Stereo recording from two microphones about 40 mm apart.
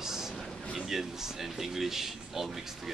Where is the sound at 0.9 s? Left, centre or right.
Centre.